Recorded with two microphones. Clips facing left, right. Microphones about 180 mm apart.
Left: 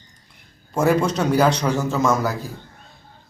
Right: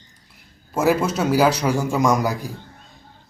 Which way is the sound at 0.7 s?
5° right (ahead or behind).